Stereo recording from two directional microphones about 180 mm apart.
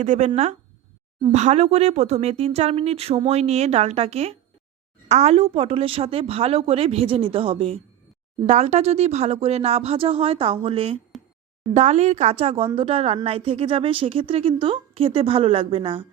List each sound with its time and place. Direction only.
0.0 s speech: 40° right (ahead or behind)
1.3 s speech: 40° right (ahead or behind)